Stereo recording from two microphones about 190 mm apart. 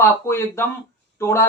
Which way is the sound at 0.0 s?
10° left (ahead or behind).